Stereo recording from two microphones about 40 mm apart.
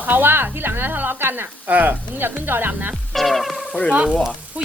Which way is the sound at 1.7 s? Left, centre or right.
Right.